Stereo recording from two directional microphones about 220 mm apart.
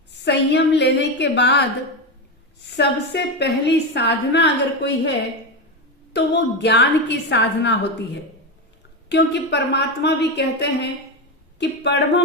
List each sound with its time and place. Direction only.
0.3 s a woman's voice: 50° left (ahead or behind)
2.6 s a woman's voice: 50° left (ahead or behind)
6.1 s a woman's voice: 50° left (ahead or behind)
9.0 s a woman's voice: 50° left (ahead or behind)